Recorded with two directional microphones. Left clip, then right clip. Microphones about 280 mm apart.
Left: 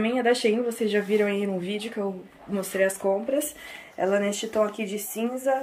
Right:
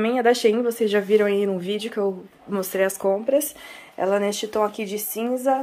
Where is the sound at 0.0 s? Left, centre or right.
Centre.